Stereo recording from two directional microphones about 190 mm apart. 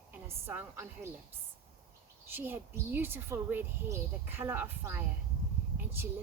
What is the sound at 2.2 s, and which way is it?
Speech, 10° right (ahead or behind).